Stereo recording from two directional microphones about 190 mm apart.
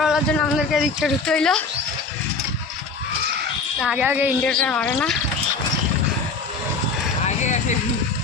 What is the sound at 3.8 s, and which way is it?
Speech, 5° right (ahead or behind).